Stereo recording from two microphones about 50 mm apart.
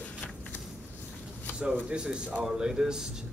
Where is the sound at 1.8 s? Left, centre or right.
Centre.